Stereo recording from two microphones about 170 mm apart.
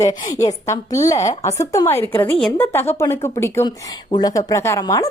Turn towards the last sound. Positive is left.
turn(degrees=20)  # may be behind; listen again after turning